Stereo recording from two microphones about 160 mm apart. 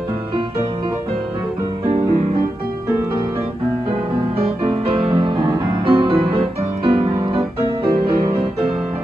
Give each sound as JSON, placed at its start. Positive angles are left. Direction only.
{"t": 4.6, "sound": "music", "side_deg": -35}